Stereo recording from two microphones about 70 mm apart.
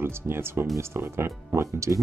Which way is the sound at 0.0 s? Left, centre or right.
Right.